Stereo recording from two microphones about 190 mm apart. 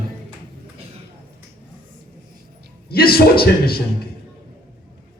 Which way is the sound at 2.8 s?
55° left (ahead or behind).